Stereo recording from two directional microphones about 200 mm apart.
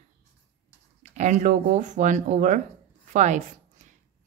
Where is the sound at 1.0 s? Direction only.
35° right (ahead or behind).